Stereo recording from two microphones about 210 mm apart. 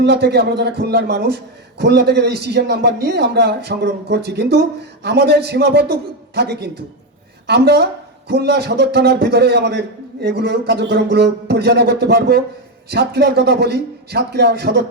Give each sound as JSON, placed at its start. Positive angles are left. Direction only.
{"t": 0.0, "sound": "a man's voice", "side_deg": -50}